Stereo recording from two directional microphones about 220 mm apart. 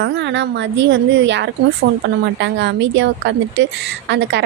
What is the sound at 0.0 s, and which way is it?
Speech, 55° right (ahead or behind).